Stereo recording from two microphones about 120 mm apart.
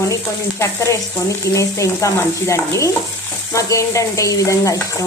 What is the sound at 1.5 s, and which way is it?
Stir, 25° left (ahead or behind).